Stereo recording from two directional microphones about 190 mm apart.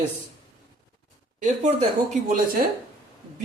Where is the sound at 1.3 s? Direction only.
40° right (ahead or behind).